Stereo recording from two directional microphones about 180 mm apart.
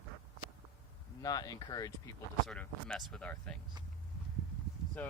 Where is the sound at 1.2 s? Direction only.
20° left (ahead or behind).